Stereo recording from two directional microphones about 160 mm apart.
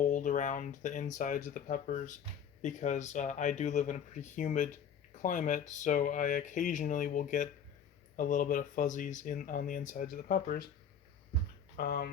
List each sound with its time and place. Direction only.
0.0 s speech: 55° left (ahead or behind)
11.8 s speech: 70° left (ahead or behind)